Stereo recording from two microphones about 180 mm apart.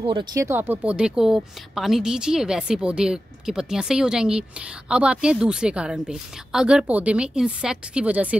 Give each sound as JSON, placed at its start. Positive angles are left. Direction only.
{"t": 0.0, "sound": "speech", "side_deg": -25}